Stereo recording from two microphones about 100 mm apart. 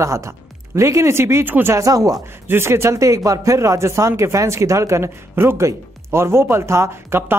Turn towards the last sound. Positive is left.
turn(degrees=-25)  # may be behind; listen again after turning